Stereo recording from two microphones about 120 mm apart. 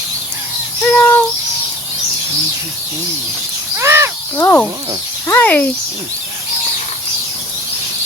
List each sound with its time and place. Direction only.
0.9 s bird: 15° left (ahead or behind)
3.8 s a sound: 25° right (ahead or behind)
4.4 s speech: 20° left (ahead or behind)